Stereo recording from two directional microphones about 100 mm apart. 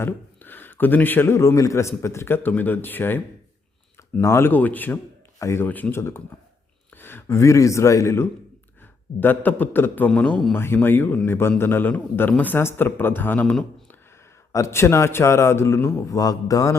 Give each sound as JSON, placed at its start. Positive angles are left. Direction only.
{"t": 0.0, "sound": "a man's voice", "side_deg": 20}
{"t": 4.2, "sound": "a man's voice", "side_deg": 25}
{"t": 5.4, "sound": "speech", "side_deg": 30}
{"t": 5.6, "sound": "a man's voice", "side_deg": 15}
{"t": 9.2, "sound": "a man's voice", "side_deg": 20}
{"t": 13.4, "sound": "a man's voice", "side_deg": 10}
{"t": 14.5, "sound": "a man's voice", "side_deg": 30}